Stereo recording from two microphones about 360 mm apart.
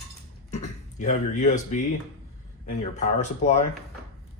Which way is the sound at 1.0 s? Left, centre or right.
Left.